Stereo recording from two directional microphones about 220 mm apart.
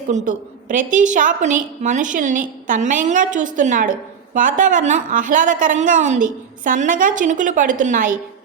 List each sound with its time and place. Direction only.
0.1 s a woman's voice: 35° right (ahead or behind)